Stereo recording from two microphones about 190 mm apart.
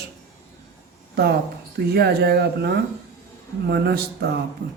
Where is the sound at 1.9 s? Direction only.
60° right (ahead or behind).